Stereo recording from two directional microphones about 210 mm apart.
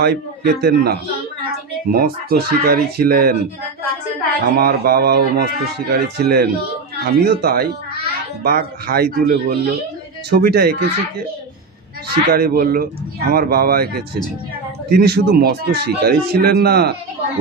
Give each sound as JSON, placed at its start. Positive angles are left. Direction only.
{"t": 0.0, "sound": "speech", "side_deg": -50}
{"t": 4.5, "sound": "speech", "side_deg": -45}
{"t": 12.0, "sound": "speech", "side_deg": -50}